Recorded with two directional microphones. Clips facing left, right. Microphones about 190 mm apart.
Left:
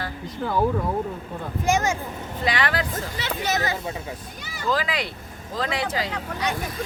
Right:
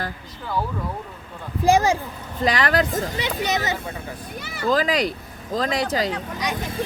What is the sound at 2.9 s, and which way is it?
Speech, 15° right (ahead or behind).